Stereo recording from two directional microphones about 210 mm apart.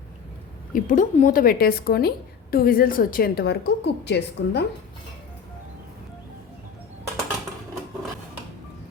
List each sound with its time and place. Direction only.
0.7 s a woman's voice: 40° left (ahead or behind)